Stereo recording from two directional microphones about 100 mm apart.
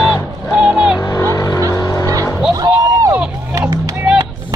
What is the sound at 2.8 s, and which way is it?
Vehicle, 25° right (ahead or behind).